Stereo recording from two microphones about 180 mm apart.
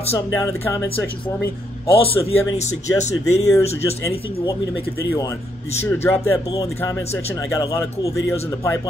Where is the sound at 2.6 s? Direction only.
40° left (ahead or behind).